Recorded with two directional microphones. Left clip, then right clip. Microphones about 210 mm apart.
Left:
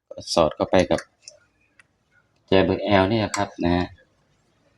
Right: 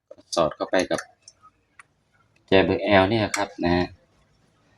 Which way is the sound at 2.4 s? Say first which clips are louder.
Even; 25° left (ahead or behind).